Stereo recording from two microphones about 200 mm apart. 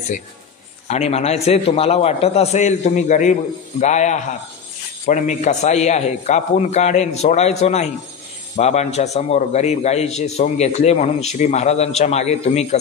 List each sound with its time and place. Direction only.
0.8 s a man's voice: 30° left (ahead or behind)